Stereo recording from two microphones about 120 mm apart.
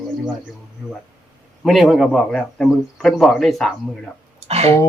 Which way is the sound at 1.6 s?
Centre (ahead or behind).